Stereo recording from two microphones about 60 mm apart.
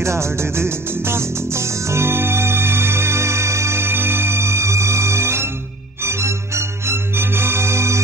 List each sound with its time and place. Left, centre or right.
0.0 s music: right